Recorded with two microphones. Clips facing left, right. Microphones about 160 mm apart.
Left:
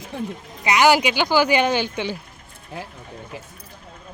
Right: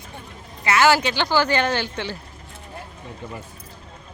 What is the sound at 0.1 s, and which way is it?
Speech, 90° left.